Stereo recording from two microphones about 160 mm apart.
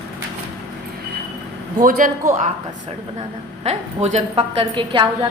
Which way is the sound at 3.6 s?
45° right (ahead or behind).